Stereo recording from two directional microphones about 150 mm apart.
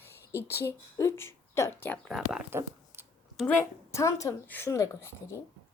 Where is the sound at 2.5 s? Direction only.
15° right (ahead or behind).